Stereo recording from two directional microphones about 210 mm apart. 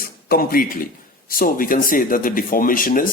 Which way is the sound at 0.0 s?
45° left (ahead or behind).